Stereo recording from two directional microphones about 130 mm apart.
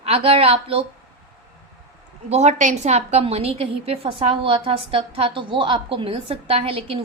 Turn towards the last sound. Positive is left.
turn(degrees=-45)  # may be behind; listen again after turning